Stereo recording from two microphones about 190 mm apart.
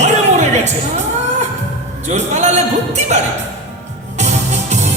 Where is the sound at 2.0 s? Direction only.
35° right (ahead or behind).